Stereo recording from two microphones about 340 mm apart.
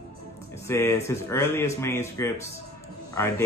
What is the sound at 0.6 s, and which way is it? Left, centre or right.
Speech, centre.